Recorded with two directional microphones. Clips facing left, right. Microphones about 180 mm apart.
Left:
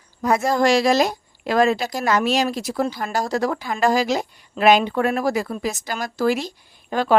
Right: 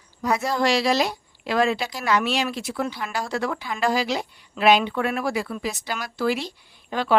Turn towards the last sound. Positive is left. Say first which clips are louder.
# left 4 dB
turn(degrees=45)  # may be behind; listen again after turning